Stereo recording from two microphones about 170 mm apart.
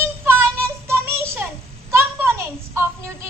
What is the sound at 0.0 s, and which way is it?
Child singing, 15° right (ahead or behind).